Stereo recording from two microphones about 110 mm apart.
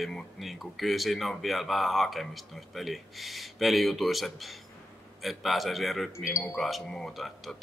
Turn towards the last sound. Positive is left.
turn(degrees=0)  # may be behind; listen again after turning